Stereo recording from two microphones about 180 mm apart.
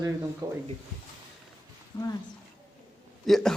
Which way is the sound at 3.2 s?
Centre (ahead or behind).